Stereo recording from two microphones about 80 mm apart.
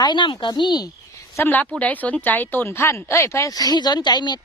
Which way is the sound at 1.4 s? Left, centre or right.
Left.